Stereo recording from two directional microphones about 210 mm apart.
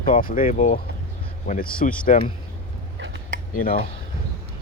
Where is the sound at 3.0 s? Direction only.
60° right (ahead or behind).